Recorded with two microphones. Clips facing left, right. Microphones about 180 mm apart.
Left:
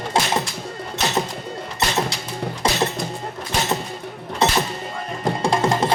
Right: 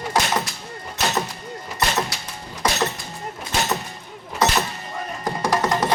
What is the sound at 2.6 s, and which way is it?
Music, 25° left (ahead or behind).